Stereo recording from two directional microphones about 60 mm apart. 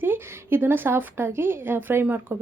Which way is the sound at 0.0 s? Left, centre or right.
Right.